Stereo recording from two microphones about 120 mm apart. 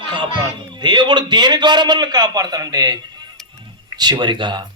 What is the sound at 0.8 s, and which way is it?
Speech, 40° right (ahead or behind).